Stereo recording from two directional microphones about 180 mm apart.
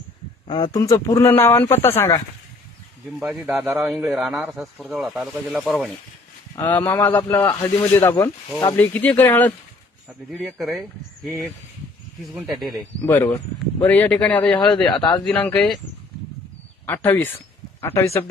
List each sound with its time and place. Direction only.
0.4 s speech: 25° left (ahead or behind)
3.2 s speech: 5° right (ahead or behind)
6.6 s speech: 10° left (ahead or behind)
10.3 s speech: centre (ahead or behind)
12.3 s speech: 5° right (ahead or behind)
13.1 s speech: 15° left (ahead or behind)
16.8 s speech: 10° left (ahead or behind)